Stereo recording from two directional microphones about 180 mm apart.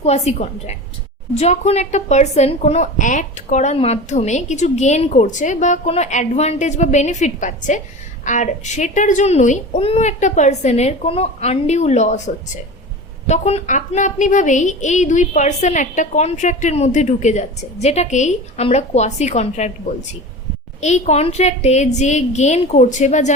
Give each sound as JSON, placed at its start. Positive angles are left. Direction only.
{"t": 0.0, "sound": "a woman's voice", "side_deg": 35}
{"t": 13.2, "sound": "a woman's voice", "side_deg": 35}
{"t": 20.8, "sound": "a woman's voice", "side_deg": 40}